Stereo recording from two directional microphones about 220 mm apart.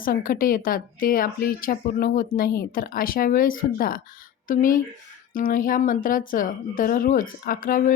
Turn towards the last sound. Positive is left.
turn(degrees=40)  # may be behind; listen again after turning